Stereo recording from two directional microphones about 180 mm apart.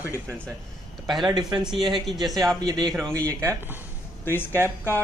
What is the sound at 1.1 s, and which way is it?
A man's voice, centre (ahead or behind).